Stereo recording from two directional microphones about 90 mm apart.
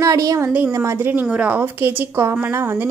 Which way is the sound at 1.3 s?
15° right (ahead or behind).